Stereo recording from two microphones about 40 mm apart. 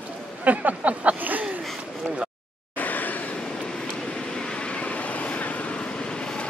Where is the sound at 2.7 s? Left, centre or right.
Left.